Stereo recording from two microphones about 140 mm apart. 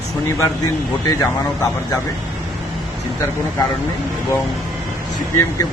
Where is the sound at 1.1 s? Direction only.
20° left (ahead or behind).